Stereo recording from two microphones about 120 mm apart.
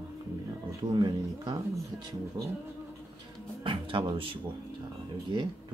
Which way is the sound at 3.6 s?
45° right (ahead or behind).